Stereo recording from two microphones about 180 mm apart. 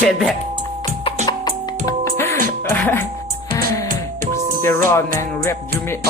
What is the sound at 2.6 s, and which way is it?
Speech, 10° left (ahead or behind).